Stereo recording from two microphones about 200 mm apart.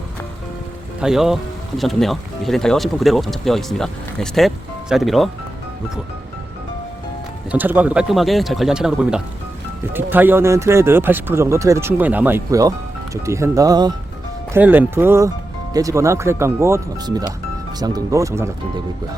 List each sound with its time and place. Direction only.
1.0 s speech: centre (ahead or behind)
7.5 s speech: 10° right (ahead or behind)
14.5 s speech: 10° right (ahead or behind)